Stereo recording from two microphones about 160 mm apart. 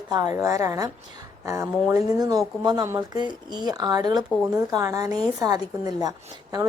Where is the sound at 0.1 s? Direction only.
25° right (ahead or behind).